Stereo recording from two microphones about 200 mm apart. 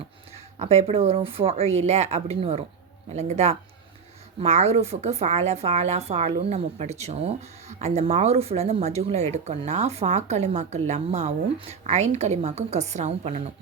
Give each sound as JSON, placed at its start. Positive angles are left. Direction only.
{"t": 0.6, "sound": "a woman's voice", "side_deg": -30}